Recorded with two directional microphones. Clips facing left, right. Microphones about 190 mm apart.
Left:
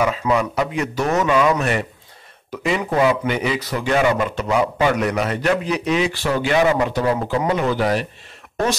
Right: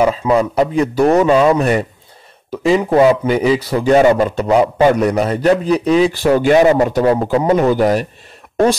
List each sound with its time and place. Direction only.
0.0 s a man's voice: 30° right (ahead or behind)